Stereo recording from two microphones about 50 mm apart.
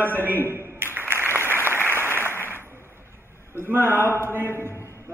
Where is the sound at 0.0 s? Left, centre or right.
Right.